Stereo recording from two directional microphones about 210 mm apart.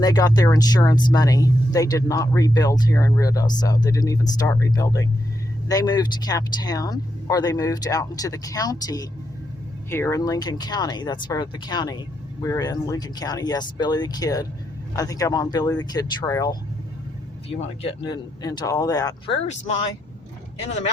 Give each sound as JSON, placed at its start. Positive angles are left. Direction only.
{"t": 0.0, "sound": "speech", "side_deg": 20}
{"t": 17.5, "sound": "speech", "side_deg": 30}